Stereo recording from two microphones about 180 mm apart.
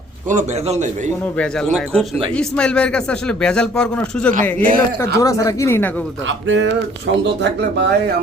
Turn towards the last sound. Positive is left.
turn(degrees=-70)  # may be behind; listen again after turning